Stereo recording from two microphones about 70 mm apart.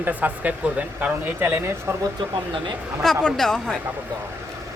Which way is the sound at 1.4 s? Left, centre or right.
Right.